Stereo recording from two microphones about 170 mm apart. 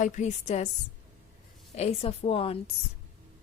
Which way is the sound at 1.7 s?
40° left (ahead or behind).